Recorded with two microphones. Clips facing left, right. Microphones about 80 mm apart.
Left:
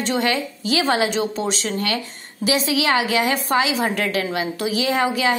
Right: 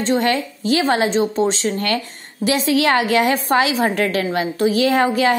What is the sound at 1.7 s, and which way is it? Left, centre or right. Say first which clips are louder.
A woman's voice: right 3 dB; right.